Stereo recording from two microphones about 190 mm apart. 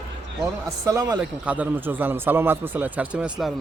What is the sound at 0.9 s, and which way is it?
Speech, 20° right (ahead or behind).